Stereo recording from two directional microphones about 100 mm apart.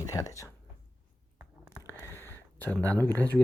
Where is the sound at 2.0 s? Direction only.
25° left (ahead or behind).